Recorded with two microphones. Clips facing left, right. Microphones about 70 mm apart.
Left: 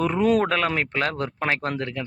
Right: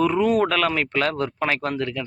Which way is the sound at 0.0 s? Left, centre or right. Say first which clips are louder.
Right 1 dB; left.